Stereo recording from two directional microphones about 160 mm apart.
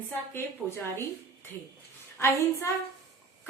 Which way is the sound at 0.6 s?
10° right (ahead or behind).